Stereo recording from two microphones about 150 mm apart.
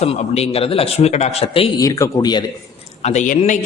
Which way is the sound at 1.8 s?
20° left (ahead or behind).